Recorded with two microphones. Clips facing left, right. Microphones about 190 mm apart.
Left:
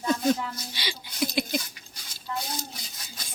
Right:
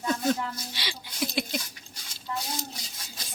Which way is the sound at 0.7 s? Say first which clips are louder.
Left 2 dB; centre (ahead or behind).